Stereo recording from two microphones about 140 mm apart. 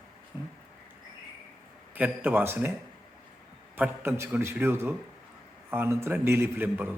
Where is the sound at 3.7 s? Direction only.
15° right (ahead or behind).